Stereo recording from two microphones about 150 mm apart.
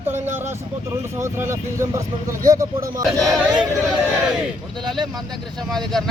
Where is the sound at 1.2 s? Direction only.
20° right (ahead or behind).